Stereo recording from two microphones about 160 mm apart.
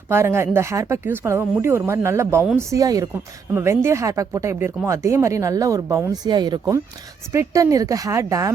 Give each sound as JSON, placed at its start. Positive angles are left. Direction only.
{"t": 0.1, "sound": "speech", "side_deg": -15}